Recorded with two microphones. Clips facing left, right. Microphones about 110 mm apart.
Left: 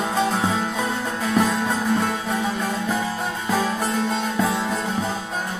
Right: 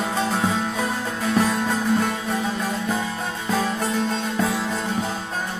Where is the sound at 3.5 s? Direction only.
5° left (ahead or behind).